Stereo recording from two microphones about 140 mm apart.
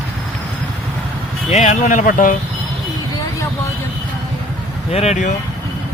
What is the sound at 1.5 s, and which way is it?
Speech, 55° left (ahead or behind).